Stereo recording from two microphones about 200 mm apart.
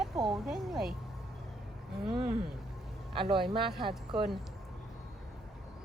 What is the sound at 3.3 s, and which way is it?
Speech, 25° right (ahead or behind).